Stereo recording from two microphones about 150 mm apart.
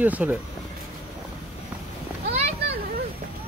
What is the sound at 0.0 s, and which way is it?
Speech, 10° right (ahead or behind).